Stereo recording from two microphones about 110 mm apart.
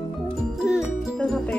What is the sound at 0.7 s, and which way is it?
Music, centre (ahead or behind).